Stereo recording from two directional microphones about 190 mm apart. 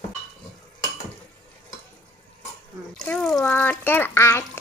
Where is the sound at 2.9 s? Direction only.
5° left (ahead or behind).